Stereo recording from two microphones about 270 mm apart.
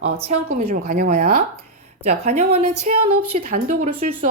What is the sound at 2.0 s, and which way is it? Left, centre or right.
Speech, right.